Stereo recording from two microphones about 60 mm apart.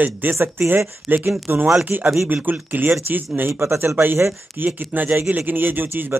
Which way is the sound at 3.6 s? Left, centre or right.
Right.